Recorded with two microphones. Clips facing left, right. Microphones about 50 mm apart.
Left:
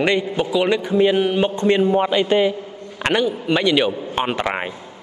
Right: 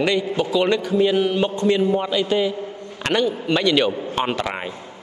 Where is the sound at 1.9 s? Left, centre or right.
Left.